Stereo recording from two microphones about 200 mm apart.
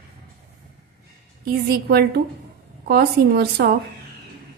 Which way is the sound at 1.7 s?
50° right (ahead or behind).